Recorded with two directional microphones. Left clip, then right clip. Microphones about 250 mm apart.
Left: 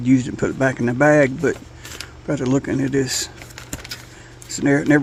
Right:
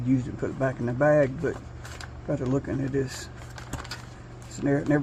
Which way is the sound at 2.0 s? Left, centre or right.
Left.